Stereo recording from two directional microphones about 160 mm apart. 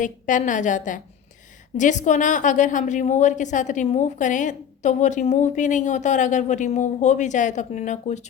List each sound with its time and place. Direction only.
0.0 s a woman's voice: 55° left (ahead or behind)